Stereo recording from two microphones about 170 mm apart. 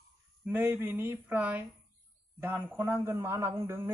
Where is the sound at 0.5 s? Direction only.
15° right (ahead or behind).